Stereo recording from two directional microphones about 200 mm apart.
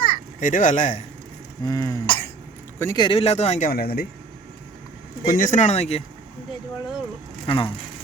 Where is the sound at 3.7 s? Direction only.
50° left (ahead or behind).